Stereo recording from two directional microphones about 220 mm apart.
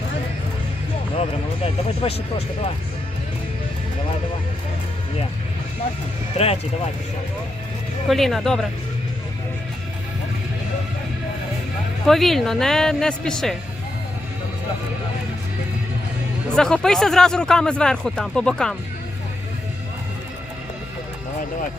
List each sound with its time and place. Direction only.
1.2 s speech: 25° left (ahead or behind)
6.3 s speech: 25° left (ahead or behind)
8.0 s speech: centre (ahead or behind)
12.0 s speech: centre (ahead or behind)
16.5 s speech: 5° left (ahead or behind)